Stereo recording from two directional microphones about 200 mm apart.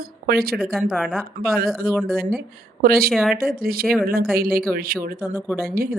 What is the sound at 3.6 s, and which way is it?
Speech, 50° right (ahead or behind).